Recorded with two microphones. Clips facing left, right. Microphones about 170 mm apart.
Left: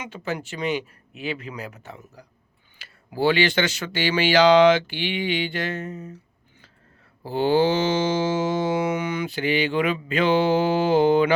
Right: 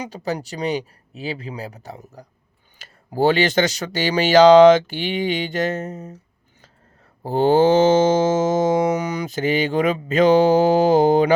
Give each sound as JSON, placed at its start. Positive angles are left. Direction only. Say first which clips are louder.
{"t": 0.0, "sound": "mantra", "louder": "right 4 dB", "side_deg": -40}
{"t": 2.7, "sound": "speech", "louder": "right 5 dB", "side_deg": -45}
{"t": 7.2, "sound": "mantra", "louder": "right 4 dB", "side_deg": -45}